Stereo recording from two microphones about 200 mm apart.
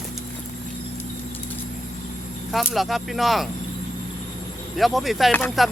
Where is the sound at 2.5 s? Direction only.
Centre (ahead or behind).